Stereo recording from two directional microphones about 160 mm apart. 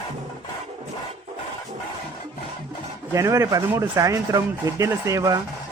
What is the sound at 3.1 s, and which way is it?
Speech, 20° right (ahead or behind).